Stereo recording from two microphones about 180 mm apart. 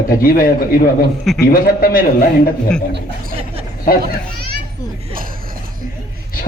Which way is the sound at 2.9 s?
65° right (ahead or behind).